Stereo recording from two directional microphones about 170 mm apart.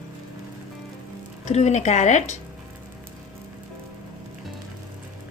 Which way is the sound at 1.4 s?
40° left (ahead or behind).